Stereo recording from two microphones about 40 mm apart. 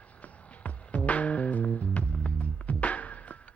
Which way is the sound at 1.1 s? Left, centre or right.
Left.